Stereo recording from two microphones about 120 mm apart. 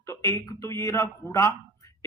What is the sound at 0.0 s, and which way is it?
Speech, 25° left (ahead or behind).